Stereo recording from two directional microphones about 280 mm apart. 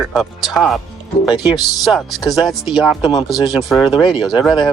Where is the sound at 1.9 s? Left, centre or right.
Centre.